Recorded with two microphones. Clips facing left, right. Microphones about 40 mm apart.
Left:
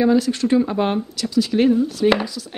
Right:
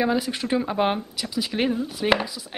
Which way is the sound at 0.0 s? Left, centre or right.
Centre.